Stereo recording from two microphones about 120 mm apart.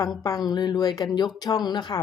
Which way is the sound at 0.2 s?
30° left (ahead or behind).